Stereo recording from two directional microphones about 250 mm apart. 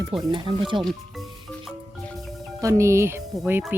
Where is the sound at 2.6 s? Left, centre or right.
Centre.